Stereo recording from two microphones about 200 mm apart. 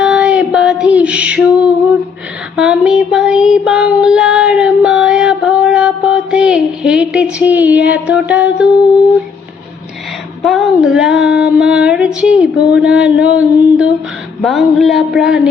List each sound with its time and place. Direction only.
0.0 s music: 5° right (ahead or behind)
2.6 s child singing: 5° right (ahead or behind)
10.4 s child singing: centre (ahead or behind)